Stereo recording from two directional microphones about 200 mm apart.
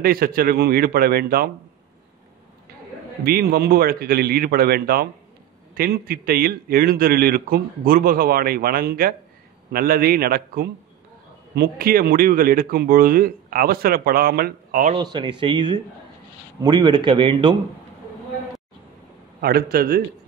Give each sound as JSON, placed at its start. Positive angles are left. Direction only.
{"t": 0.0, "sound": "a man's voice", "side_deg": -45}
{"t": 3.3, "sound": "a man's voice", "side_deg": -50}
{"t": 15.0, "sound": "speech", "side_deg": -20}
{"t": 19.4, "sound": "a man's voice", "side_deg": -50}